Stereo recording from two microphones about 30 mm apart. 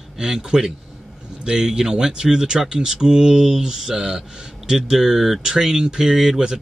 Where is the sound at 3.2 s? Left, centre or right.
Centre.